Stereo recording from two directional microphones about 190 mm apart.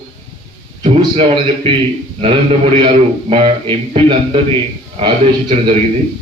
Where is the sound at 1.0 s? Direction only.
25° right (ahead or behind).